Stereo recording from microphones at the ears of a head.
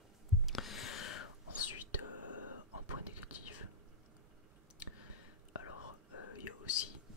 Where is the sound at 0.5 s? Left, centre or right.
Left.